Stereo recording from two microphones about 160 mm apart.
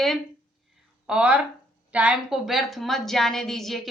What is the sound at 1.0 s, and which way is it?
A woman's voice, 5° right (ahead or behind).